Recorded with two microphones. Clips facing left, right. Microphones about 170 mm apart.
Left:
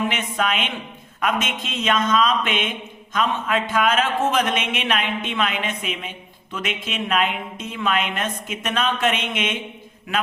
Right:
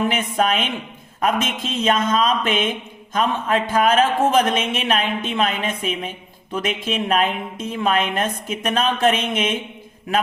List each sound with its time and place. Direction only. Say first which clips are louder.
0.1 s speech: right 4 dB; 40° right (ahead or behind)